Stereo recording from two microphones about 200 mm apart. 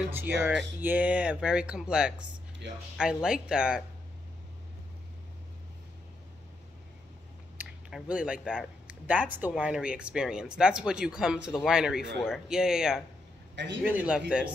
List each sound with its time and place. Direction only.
0.1 s speech: 10° right (ahead or behind)
2.6 s speech: 60° right (ahead or behind)
3.0 s speech: 5° right (ahead or behind)
7.5 s speech: 5° right (ahead or behind)